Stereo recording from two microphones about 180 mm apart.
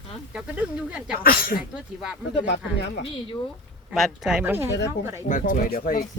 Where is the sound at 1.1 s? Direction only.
55° left (ahead or behind).